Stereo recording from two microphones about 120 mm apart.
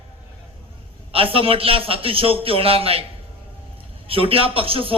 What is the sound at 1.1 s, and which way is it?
A man's voice, 50° right (ahead or behind).